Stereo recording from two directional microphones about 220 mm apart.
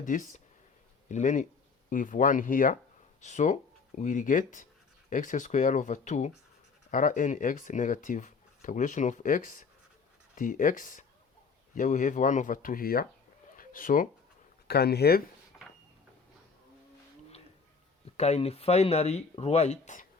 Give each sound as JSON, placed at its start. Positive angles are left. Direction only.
{"t": 0.0, "sound": "speech", "side_deg": 35}
{"t": 18.0, "sound": "speech", "side_deg": 30}